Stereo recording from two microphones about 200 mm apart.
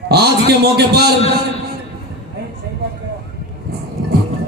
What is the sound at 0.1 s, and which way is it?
Speech, 55° right (ahead or behind).